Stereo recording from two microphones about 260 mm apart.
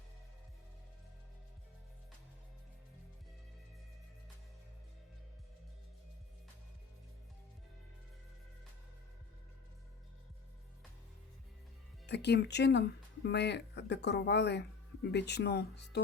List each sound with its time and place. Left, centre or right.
12.0 s speech: left